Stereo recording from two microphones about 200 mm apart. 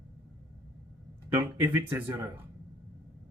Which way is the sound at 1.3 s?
10° right (ahead or behind).